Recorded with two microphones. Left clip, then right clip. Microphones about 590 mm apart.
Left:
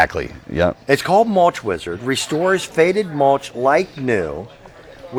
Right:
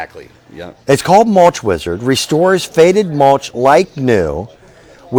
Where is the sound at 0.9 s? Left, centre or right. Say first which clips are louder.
Right 8 dB; right.